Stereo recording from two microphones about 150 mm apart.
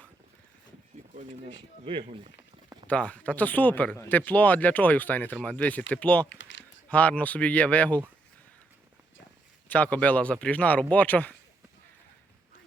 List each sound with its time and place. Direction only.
1.8 s speech: 35° right (ahead or behind)
2.8 s speech: 10° left (ahead or behind)
9.6 s speech: 10° left (ahead or behind)